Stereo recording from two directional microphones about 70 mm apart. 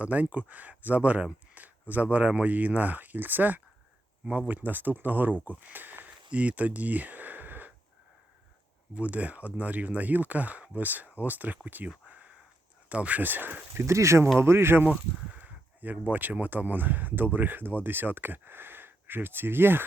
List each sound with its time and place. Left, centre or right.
0.0 s speech: right
9.0 s speech: right
12.0 s a sound: centre
12.9 s speech: centre
13.7 s speech: right
15.4 s speech: right